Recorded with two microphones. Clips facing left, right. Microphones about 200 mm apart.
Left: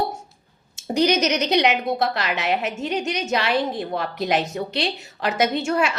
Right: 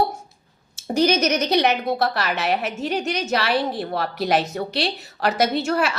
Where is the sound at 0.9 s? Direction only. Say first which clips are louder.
Right 1 dB; 20° left (ahead or behind).